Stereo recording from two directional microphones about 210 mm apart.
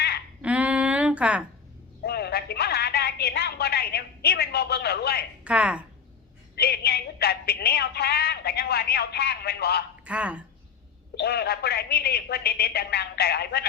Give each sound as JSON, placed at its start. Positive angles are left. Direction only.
{"t": 0.4, "sound": "a sound", "side_deg": -5}
{"t": 2.0, "sound": "music", "side_deg": 50}
{"t": 5.5, "sound": "speech", "side_deg": -5}
{"t": 6.6, "sound": "a woman's voice", "side_deg": 50}
{"t": 10.0, "sound": "speech", "side_deg": -5}
{"t": 11.1, "sound": "a woman's voice", "side_deg": 50}